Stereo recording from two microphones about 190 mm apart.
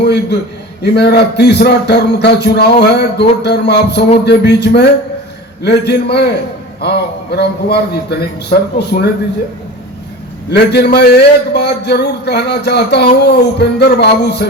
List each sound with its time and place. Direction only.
0.0 s a man's voice: 65° left (ahead or behind)
10.5 s a man's voice: 60° left (ahead or behind)